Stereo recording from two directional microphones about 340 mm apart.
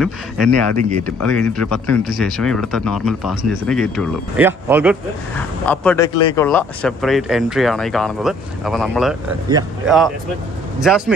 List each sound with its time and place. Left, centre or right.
0.5 s speech: right
1.2 s speech: centre
5.7 s speech: centre